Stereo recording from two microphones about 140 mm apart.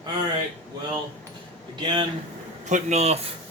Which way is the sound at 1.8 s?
35° right (ahead or behind).